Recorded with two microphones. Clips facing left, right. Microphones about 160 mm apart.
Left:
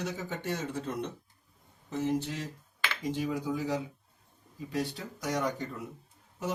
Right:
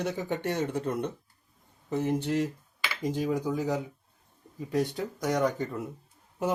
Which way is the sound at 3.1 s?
40° right (ahead or behind).